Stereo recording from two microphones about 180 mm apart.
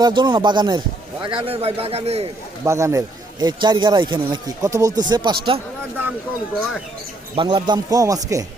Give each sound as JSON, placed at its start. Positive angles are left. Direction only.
{"t": 0.0, "sound": "a man's voice", "side_deg": -25}
{"t": 2.6, "sound": "a man's voice", "side_deg": -15}
{"t": 7.3, "sound": "speech", "side_deg": -25}